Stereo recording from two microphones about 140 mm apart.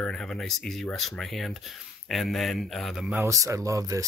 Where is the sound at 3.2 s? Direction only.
20° right (ahead or behind).